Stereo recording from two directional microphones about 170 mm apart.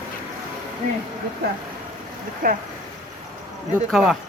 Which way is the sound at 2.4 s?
55° right (ahead or behind).